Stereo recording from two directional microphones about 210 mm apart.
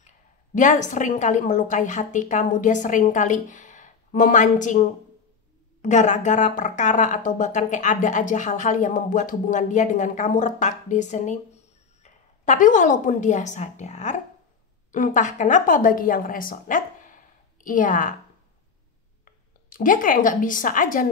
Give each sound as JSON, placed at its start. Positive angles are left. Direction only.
{"t": 0.6, "sound": "a woman's voice", "side_deg": 35}
{"t": 19.2, "sound": "a woman's voice", "side_deg": 40}